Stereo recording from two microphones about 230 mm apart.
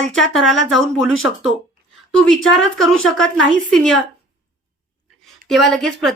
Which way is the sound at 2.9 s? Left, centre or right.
Left.